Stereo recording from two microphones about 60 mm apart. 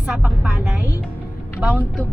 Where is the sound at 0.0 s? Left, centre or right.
Right.